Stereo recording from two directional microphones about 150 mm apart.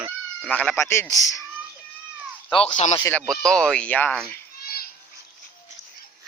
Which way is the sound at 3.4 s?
5° left (ahead or behind).